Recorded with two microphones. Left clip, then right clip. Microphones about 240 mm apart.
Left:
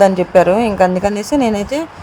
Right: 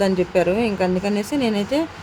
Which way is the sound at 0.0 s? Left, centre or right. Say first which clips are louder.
Left 9 dB; centre.